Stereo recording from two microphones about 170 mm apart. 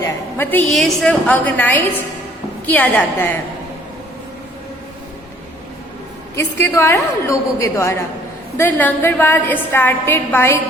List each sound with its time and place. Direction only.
0.7 s a woman's voice: centre (ahead or behind)
6.3 s a woman's voice: 15° left (ahead or behind)